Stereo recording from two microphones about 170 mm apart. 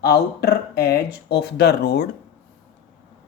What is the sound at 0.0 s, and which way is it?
Speech, 70° left (ahead or behind).